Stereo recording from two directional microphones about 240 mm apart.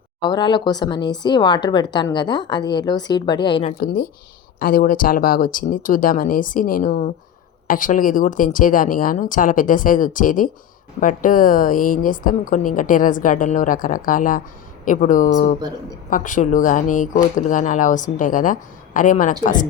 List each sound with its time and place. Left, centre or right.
0.2 s speech: centre
3.8 s speech: left